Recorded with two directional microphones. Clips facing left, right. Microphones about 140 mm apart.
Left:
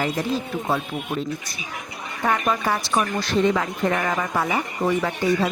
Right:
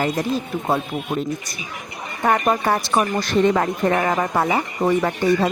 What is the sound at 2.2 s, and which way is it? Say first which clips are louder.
A woman's voice: right 4 dB; 45° right (ahead or behind).